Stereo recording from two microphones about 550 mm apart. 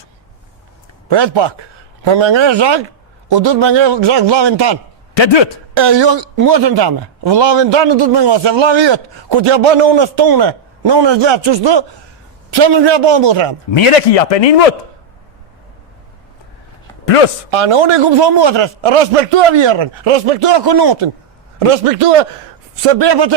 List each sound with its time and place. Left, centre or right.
1.0 s speech: right
5.1 s a man's voice: left
5.7 s speech: right
13.7 s a man's voice: left
17.1 s speech: left
17.5 s speech: right
21.6 s a man's voice: right
22.8 s speech: right